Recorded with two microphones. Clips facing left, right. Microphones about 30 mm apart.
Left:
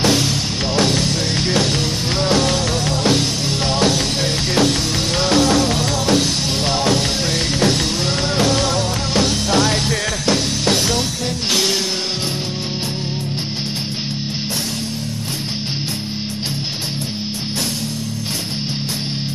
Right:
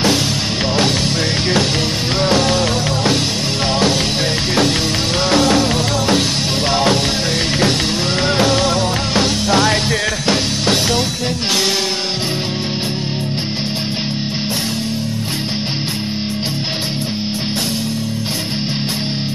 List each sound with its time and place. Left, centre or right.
0.7 s music: centre